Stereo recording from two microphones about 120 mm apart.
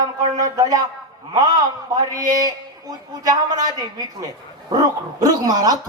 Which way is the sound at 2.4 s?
30° right (ahead or behind).